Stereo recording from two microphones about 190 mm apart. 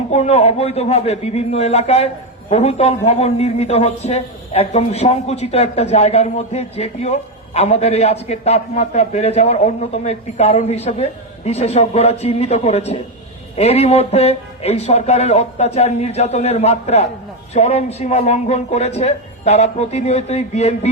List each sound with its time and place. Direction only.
0.1 s a man's voice: 35° left (ahead or behind)